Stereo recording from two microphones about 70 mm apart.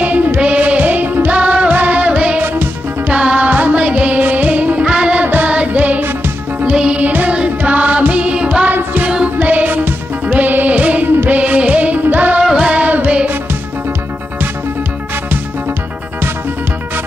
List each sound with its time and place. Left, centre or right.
0.0 s music: right